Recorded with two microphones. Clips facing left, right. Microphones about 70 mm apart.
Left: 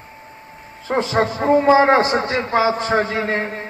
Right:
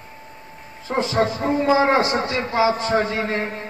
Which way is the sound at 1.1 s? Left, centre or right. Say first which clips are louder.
Left 5 dB; left.